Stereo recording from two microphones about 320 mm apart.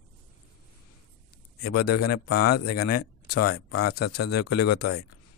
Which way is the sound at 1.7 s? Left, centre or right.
Left.